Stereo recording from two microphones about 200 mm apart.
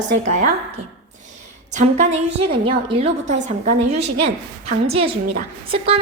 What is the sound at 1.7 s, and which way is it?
A woman's voice, 35° right (ahead or behind).